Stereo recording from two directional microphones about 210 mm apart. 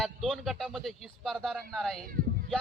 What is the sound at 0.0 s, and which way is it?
A man's voice, centre (ahead or behind).